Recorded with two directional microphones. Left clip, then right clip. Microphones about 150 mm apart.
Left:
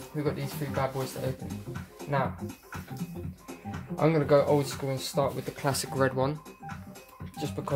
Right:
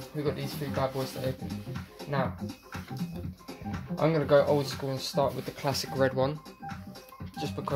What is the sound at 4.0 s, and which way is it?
Speech, 30° left (ahead or behind).